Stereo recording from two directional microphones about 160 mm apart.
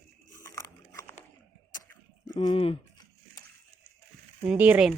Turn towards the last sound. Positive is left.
turn(degrees=-5)  # may be behind; listen again after turning